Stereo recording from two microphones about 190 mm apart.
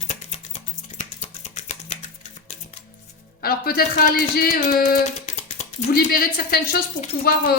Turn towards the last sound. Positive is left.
turn(degrees=50)  # may be behind; listen again after turning